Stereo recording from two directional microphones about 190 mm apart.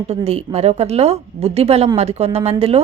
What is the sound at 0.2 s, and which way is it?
A woman's voice, 30° right (ahead or behind).